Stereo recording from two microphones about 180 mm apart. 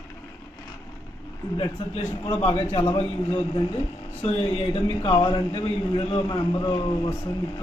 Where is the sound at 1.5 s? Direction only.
25° left (ahead or behind).